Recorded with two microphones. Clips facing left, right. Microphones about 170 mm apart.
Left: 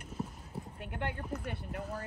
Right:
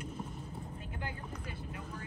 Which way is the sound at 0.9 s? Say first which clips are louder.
Left 6 dB; 65° left (ahead or behind).